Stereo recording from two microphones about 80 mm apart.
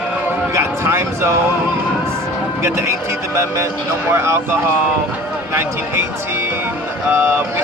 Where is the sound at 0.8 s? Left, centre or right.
Right.